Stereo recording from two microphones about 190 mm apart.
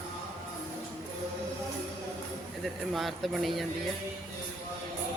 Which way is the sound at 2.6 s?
Centre (ahead or behind).